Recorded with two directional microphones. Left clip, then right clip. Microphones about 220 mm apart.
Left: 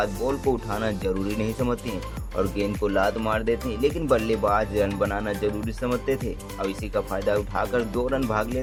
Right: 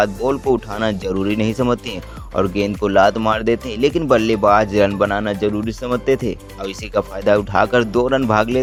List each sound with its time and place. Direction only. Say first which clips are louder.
0.0 s speech: right 7 dB; 40° right (ahead or behind)